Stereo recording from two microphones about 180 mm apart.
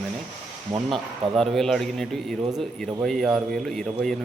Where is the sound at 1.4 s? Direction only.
Centre (ahead or behind).